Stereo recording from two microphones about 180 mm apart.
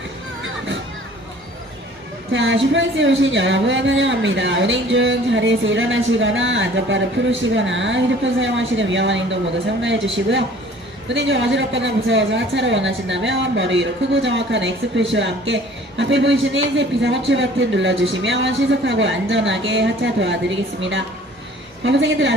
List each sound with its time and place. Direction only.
2.3 s a woman's voice: 90° right